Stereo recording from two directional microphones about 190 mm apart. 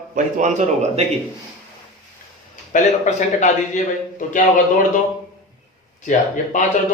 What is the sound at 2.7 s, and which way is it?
A man's voice, 40° left (ahead or behind).